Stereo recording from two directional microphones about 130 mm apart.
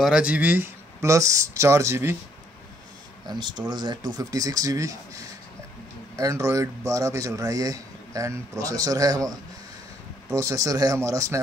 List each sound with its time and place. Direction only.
0.0 s speech: 5° right (ahead or behind)
3.3 s speech: 35° right (ahead or behind)
10.3 s speech: 25° right (ahead or behind)